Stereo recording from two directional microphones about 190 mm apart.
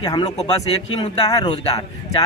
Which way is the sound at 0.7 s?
30° left (ahead or behind).